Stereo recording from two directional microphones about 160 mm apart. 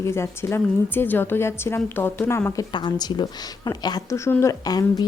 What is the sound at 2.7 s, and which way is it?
A woman's voice, 30° left (ahead or behind).